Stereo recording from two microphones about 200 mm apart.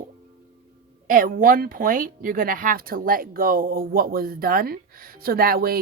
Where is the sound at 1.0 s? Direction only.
45° right (ahead or behind).